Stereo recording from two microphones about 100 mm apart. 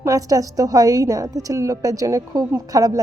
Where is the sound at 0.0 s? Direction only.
35° right (ahead or behind).